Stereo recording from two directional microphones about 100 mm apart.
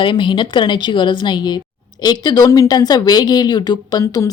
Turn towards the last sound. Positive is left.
turn(degrees=40)  # may be behind; listen again after turning